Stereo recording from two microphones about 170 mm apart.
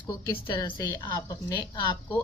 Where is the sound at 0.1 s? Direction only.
25° left (ahead or behind).